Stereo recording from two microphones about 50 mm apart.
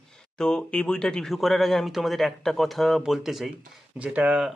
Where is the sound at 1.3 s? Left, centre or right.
Centre.